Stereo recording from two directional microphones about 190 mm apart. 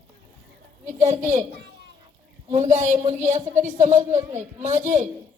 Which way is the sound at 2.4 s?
40° right (ahead or behind).